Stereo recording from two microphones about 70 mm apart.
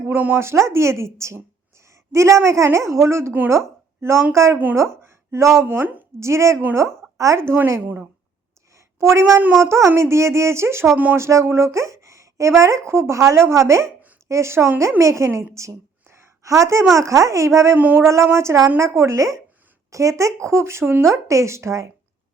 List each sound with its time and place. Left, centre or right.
0.1 s speech: right
0.3 s speech: right
5.6 s speech: right
6.1 s speech: right
8.7 s a sound: right
9.6 s speech: right
10.9 s speech: right
11.2 s speech: right
15.5 s a sound: right
16.9 s speech: right
17.7 s speech: right
18.0 s speech: right